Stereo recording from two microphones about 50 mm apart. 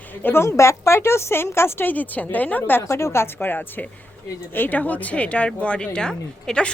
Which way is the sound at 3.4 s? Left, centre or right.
Left.